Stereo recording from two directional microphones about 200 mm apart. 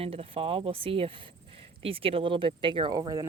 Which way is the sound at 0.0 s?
30° right (ahead or behind).